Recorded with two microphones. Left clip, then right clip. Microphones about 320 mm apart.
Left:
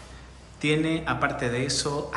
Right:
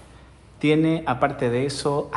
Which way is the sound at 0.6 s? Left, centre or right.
Centre.